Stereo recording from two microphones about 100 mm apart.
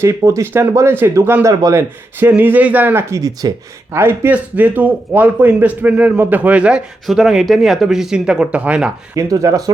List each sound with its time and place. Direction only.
0.0 s speech: 30° right (ahead or behind)
3.1 s speech: 35° right (ahead or behind)
3.9 s speech: 25° right (ahead or behind)
9.1 s speech: 35° right (ahead or behind)